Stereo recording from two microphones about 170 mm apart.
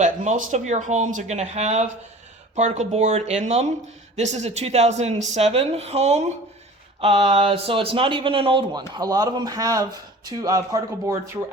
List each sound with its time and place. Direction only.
0.0 s speech: 50° right (ahead or behind); by 11.3 s 15° right (ahead or behind)